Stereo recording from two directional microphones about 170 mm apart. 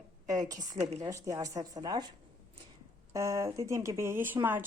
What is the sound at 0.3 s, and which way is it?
A woman's voice, 20° right (ahead or behind).